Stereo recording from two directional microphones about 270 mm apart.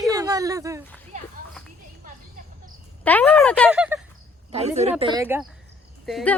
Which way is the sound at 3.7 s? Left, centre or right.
Centre.